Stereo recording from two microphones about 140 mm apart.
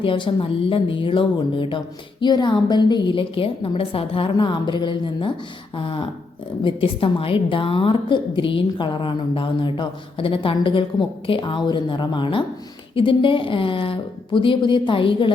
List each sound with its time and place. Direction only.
0.0 s a woman's voice: 35° left (ahead or behind)